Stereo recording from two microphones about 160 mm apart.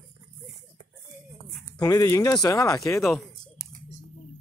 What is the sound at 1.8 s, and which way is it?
Speech, 20° left (ahead or behind).